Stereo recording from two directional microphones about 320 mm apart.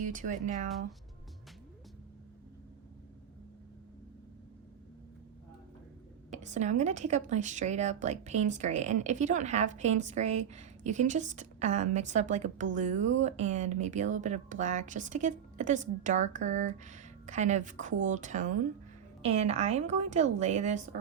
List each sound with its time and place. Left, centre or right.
0.0 s speech: right
6.3 s speech: right